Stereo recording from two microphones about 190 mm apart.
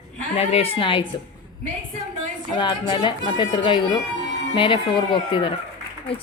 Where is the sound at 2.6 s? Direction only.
25° left (ahead or behind).